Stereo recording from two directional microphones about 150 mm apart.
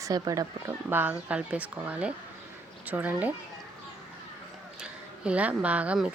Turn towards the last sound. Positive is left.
turn(degrees=-5)  # may be behind; listen again after turning